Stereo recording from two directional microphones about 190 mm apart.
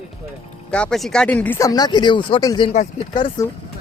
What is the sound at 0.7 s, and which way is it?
Speech, 5° left (ahead or behind).